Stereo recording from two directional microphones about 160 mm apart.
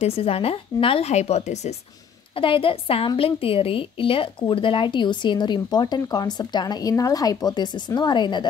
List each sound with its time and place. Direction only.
0.0 s speech: 35° left (ahead or behind)
2.3 s a woman's voice: 35° left (ahead or behind)